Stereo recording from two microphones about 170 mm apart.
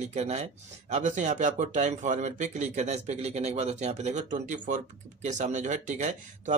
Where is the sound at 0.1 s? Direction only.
40° right (ahead or behind).